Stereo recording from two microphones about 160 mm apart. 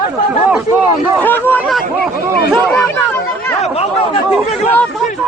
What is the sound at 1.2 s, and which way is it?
Speech, 10° left (ahead or behind).